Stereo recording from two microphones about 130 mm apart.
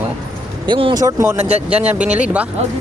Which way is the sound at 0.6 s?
40° right (ahead or behind).